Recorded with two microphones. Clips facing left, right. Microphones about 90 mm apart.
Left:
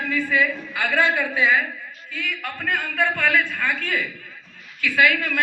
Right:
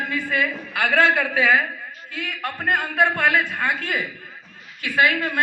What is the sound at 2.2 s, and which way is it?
A man's voice, 40° right (ahead or behind).